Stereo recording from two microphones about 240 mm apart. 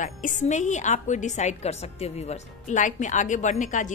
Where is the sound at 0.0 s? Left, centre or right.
Left.